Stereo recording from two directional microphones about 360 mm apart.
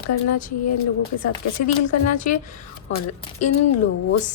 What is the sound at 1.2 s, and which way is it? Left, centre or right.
Speech, left.